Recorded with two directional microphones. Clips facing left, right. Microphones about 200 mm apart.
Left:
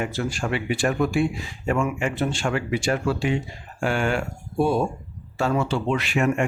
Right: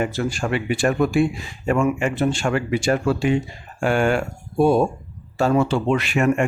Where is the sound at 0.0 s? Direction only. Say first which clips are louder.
Right 3 dB; 50° right (ahead or behind).